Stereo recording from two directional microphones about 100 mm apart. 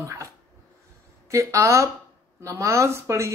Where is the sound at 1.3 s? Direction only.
30° right (ahead or behind).